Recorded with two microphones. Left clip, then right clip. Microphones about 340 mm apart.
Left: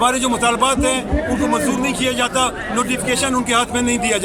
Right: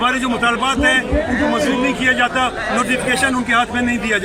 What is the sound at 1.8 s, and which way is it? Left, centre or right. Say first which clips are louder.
A man's voice: right 3 dB; centre.